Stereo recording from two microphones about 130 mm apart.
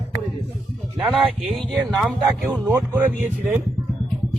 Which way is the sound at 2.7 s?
20° right (ahead or behind).